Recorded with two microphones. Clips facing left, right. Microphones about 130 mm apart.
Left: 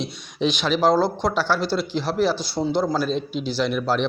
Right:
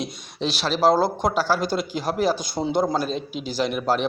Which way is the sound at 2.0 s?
45° right (ahead or behind).